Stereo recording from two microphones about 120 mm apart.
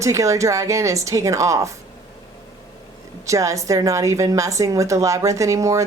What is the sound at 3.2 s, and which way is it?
A woman's voice, 25° right (ahead or behind).